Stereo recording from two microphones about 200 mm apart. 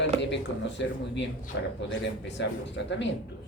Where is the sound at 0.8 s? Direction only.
60° left (ahead or behind).